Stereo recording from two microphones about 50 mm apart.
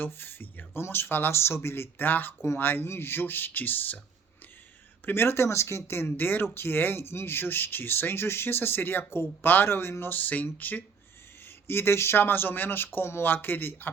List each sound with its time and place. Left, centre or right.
0.0 s speech: left
5.0 s speech: left
10.1 s speech: left
11.4 s speech: left